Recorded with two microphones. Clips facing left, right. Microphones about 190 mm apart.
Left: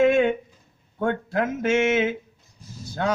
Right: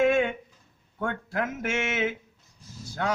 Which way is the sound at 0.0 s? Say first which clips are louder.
Left 4 dB; 20° left (ahead or behind).